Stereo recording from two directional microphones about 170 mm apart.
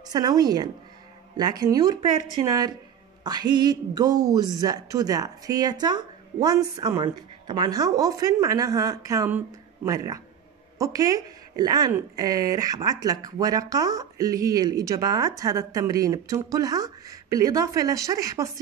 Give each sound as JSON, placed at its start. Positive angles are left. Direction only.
{"t": 0.1, "sound": "speech", "side_deg": -20}